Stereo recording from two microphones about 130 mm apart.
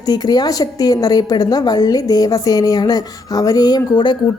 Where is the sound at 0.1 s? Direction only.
30° left (ahead or behind).